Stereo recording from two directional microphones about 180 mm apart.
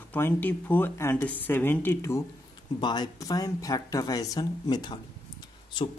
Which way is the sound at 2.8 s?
25° left (ahead or behind).